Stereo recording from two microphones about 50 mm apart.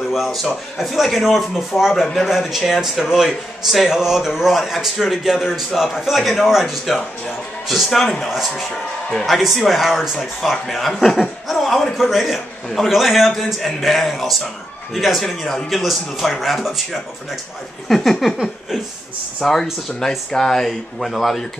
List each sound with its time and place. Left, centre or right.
0.1 s a man's voice: centre
19.4 s a man's voice: centre